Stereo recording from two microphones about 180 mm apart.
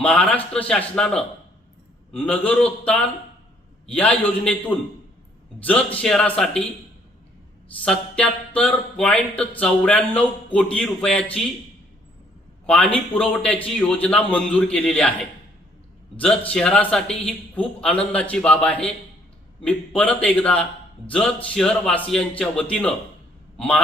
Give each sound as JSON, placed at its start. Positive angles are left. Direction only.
{"t": 0.0, "sound": "a man's voice", "side_deg": 5}
{"t": 5.6, "sound": "a man's voice", "side_deg": 10}
{"t": 7.9, "sound": "a man's voice", "side_deg": 5}
{"t": 12.6, "sound": "a man's voice", "side_deg": 5}
{"t": 16.1, "sound": "a man's voice", "side_deg": 10}